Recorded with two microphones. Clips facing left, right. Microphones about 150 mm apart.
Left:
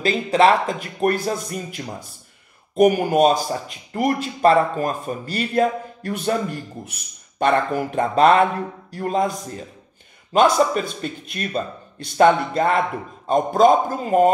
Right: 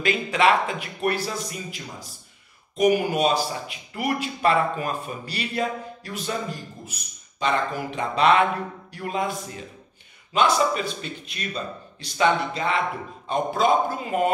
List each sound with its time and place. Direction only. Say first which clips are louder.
0.0 s a man's voice: left 5 dB; 35° left (ahead or behind)